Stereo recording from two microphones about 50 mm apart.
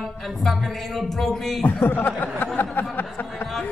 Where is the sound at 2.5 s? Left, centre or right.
Left.